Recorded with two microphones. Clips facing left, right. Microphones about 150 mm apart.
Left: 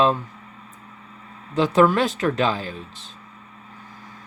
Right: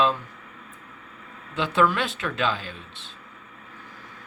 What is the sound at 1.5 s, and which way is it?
Speech, 40° left (ahead or behind).